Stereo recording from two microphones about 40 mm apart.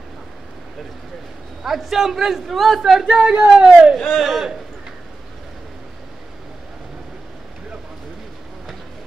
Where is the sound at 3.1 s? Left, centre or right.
Right.